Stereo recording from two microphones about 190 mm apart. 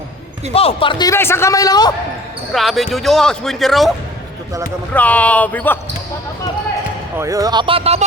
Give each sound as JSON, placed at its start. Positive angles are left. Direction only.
{"t": 0.5, "sound": "a man's voice", "side_deg": 30}
{"t": 2.5, "sound": "speech", "side_deg": 0}
{"t": 4.9, "sound": "speech", "side_deg": 5}
{"t": 7.2, "sound": "speech", "side_deg": -15}